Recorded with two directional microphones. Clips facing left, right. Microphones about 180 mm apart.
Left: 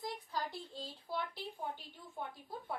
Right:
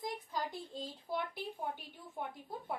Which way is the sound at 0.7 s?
20° right (ahead or behind).